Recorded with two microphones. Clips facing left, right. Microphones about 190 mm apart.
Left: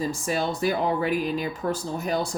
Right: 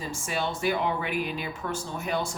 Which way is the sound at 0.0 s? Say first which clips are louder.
Left 5 dB; 40° left (ahead or behind).